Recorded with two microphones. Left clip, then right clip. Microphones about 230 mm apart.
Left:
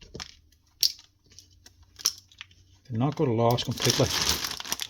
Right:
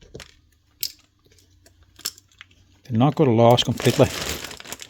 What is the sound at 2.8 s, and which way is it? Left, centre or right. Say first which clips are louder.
Speech: right 8 dB; right.